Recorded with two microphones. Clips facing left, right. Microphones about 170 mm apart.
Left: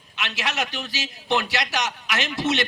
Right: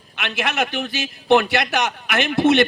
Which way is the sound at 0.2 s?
55° right (ahead or behind).